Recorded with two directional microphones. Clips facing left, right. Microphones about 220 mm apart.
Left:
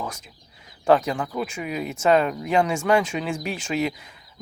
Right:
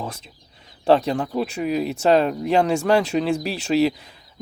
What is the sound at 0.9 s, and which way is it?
Speech, 35° right (ahead or behind).